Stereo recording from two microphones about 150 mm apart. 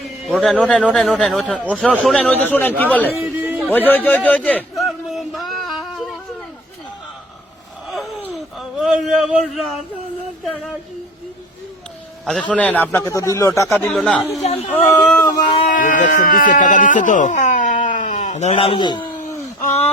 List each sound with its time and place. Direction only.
0.3 s a man's voice: 5° left (ahead or behind)
2.3 s a man's voice: 10° left (ahead or behind)
3.2 s a sound: 10° right (ahead or behind)
3.7 s a sound: 10° left (ahead or behind)
8.2 s a sound: 5° right (ahead or behind)
9.1 s speech: centre (ahead or behind)
12.2 s a man's voice: 5° left (ahead or behind); by 13.5 s 20° left (ahead or behind)
13.9 s speech: centre (ahead or behind)
14.7 s a man's voice: 10° left (ahead or behind)
15.2 s speech: 25° left (ahead or behind)
15.5 s speech: 55° left (ahead or behind); by 19.0 s 30° left (ahead or behind)